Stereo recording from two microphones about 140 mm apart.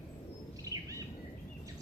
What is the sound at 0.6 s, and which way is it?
Bird, 25° right (ahead or behind).